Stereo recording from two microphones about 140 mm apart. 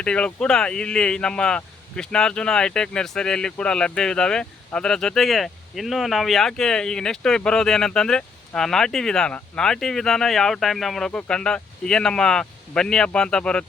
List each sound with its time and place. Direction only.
0.0 s speech: 5° left (ahead or behind)